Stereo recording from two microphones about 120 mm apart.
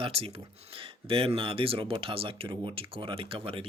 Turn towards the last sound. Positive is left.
turn(degrees=-50)  # may be behind; listen again after turning